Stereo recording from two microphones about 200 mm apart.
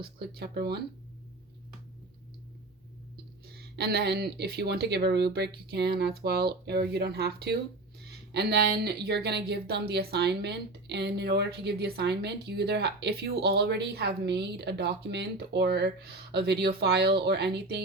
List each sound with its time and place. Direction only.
0.0 s speech: 50° right (ahead or behind)
3.4 s speech: 50° right (ahead or behind)